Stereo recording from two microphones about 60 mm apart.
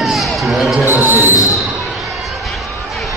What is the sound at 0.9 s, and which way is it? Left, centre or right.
Speech, right.